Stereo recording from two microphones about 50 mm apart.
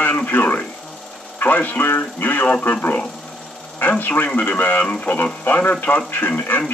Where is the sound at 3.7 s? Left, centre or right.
Left.